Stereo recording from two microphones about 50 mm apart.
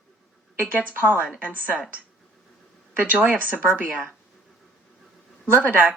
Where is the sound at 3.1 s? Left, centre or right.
Centre.